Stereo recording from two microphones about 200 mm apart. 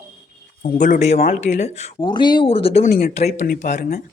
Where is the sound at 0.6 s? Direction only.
40° left (ahead or behind).